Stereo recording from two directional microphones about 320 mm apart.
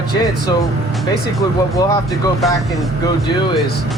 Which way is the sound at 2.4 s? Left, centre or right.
Centre.